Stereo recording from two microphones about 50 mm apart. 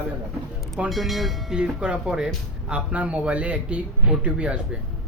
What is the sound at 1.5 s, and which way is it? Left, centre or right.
Speech, centre.